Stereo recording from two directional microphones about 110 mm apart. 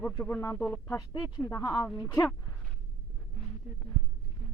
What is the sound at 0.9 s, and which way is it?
Speech, 35° left (ahead or behind).